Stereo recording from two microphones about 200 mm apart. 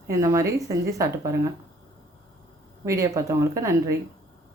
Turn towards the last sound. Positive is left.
turn(degrees=-15)  # may be behind; listen again after turning